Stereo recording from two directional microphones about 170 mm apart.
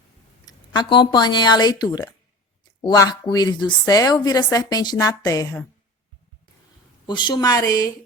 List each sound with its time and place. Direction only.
0.4 s a woman's voice: 25° left (ahead or behind)
7.1 s a woman's voice: 25° left (ahead or behind)